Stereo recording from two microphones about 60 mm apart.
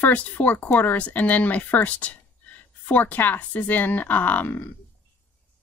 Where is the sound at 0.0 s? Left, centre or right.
Left.